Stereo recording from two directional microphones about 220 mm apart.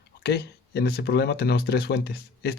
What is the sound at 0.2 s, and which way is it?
Speech, 50° left (ahead or behind).